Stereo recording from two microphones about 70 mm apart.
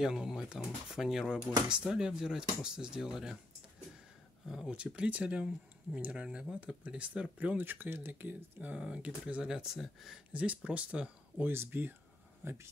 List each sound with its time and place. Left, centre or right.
0.0 s speech: centre
4.6 s speech: centre
6.2 s speech: centre
8.7 s speech: centre
10.3 s speech: centre
11.4 s speech: right